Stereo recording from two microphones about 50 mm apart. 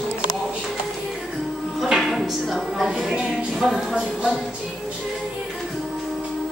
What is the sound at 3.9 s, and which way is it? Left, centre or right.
Music, centre.